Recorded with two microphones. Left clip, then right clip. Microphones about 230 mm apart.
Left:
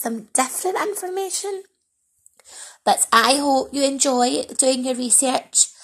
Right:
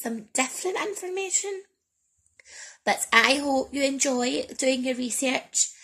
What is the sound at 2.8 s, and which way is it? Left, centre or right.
A woman's voice, centre.